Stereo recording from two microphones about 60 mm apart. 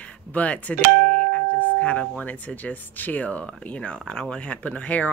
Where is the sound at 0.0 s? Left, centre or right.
Left.